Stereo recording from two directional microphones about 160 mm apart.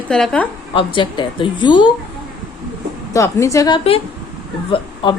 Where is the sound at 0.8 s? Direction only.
30° left (ahead or behind).